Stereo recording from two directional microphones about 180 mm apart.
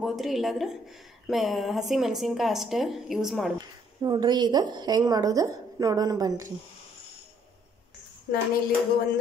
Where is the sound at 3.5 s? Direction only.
25° right (ahead or behind).